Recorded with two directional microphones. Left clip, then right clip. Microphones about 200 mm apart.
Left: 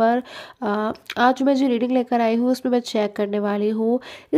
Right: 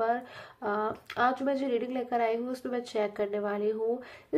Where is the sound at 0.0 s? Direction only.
50° left (ahead or behind).